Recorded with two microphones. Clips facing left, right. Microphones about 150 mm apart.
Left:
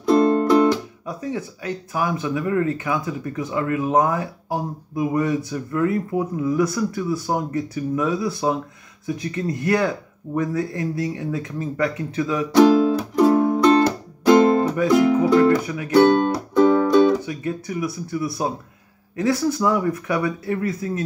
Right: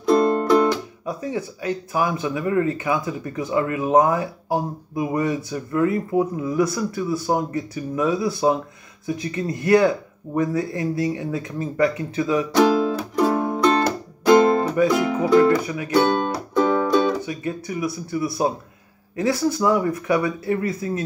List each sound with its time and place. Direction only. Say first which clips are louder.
0.1 s music: left 1 dB; 5° right (ahead or behind)
1.0 s speech: right 1 dB; 5° right (ahead or behind)
12.8 s music: left 4 dB; centre (ahead or behind)
16.5 s speech: left 4 dB; centre (ahead or behind)